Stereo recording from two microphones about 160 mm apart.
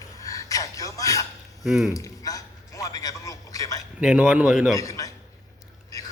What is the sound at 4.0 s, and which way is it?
Speech, 5° right (ahead or behind).